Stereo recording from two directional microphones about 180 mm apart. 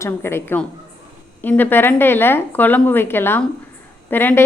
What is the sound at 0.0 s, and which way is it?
A woman's voice, 15° left (ahead or behind).